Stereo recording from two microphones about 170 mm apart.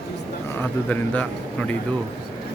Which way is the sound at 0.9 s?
10° left (ahead or behind).